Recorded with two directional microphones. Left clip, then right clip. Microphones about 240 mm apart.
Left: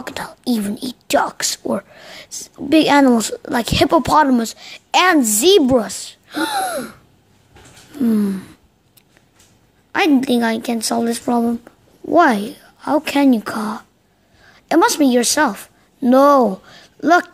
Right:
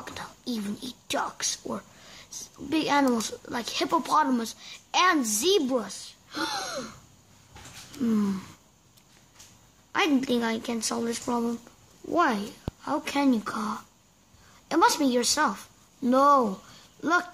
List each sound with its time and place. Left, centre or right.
0.0 s speech: left
8.0 s a woman's voice: centre
9.9 s a woman's voice: centre